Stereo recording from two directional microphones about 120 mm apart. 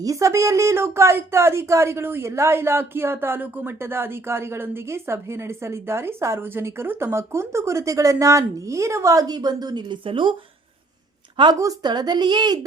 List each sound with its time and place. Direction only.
0.0 s a woman's voice: 25° right (ahead or behind); by 10.3 s 45° right (ahead or behind)
11.3 s speech: 40° right (ahead or behind)